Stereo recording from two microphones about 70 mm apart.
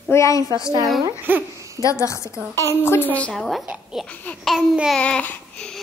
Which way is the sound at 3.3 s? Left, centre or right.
Centre.